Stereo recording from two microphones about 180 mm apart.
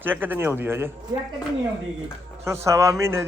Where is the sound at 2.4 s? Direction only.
15° right (ahead or behind).